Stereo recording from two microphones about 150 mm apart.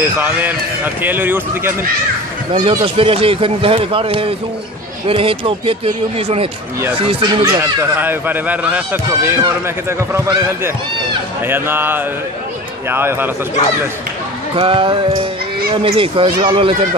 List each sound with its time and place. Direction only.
0.0 s speech: 10° right (ahead or behind)
2.5 s speech: 35° right (ahead or behind)
7.4 s speech: 15° right (ahead or behind)
11.4 s speech: 15° right (ahead or behind)
14.5 s speech: 35° right (ahead or behind)